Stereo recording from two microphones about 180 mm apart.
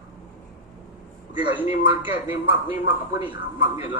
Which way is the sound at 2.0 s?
10° right (ahead or behind).